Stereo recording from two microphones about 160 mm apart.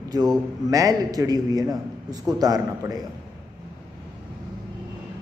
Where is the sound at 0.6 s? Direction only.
20° right (ahead or behind).